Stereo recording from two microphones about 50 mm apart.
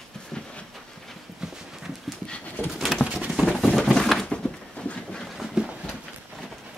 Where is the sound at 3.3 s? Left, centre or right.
Centre.